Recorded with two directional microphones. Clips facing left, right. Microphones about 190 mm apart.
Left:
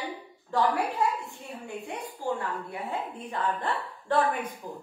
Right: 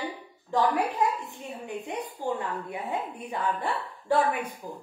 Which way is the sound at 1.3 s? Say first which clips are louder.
Right 2 dB; 20° right (ahead or behind).